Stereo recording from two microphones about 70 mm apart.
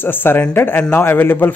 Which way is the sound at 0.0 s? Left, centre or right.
Left.